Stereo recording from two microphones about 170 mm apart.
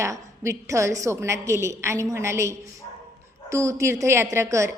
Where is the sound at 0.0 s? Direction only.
15° right (ahead or behind).